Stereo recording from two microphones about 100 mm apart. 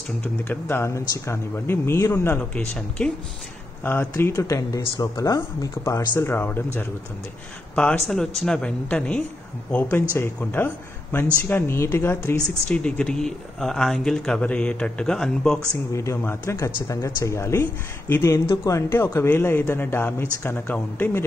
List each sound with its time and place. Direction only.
0.2 s speech: 20° left (ahead or behind)
7.7 s speech: 10° left (ahead or behind)
12.4 s speech: 10° left (ahead or behind)
15.9 s speech: 30° left (ahead or behind)